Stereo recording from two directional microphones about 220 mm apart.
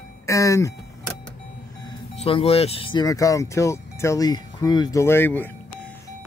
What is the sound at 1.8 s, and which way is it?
Speech, 25° left (ahead or behind).